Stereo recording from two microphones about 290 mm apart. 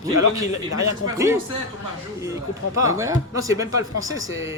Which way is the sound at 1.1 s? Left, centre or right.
Centre.